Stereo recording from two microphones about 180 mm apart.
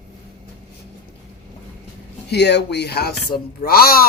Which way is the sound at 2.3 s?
70° left (ahead or behind).